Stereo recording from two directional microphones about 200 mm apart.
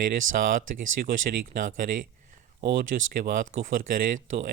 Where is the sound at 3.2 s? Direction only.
45° right (ahead or behind).